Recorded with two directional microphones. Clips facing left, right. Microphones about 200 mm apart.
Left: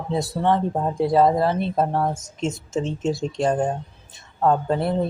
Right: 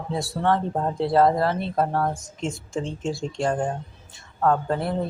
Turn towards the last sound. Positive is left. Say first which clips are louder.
# left 2 dB
turn(degrees=20)  # may be behind; listen again after turning